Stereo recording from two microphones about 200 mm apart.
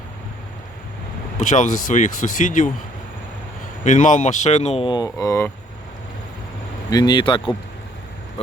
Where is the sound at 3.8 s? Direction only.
40° left (ahead or behind); by 5.5 s 15° left (ahead or behind).